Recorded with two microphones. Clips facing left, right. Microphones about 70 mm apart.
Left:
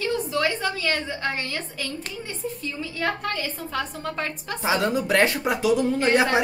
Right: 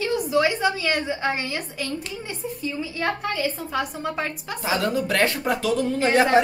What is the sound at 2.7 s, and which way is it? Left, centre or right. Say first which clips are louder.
A woman's voice: right 2 dB; centre.